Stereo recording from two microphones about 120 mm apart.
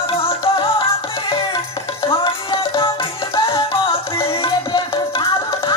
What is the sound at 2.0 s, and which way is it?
Music, 40° left (ahead or behind).